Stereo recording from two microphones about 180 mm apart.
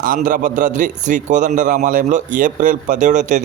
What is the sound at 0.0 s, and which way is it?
A man's voice, 45° right (ahead or behind).